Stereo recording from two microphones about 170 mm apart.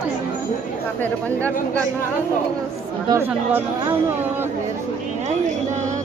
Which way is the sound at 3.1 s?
15° right (ahead or behind).